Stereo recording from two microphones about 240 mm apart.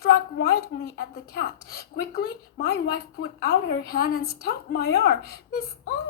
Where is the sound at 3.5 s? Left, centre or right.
Left.